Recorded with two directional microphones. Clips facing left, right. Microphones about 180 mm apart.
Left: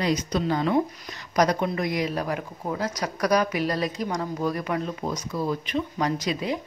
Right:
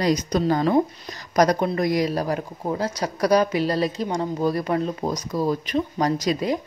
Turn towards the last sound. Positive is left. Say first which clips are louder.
# right 4 dB
turn(degrees=-40)  # may be behind; listen again after turning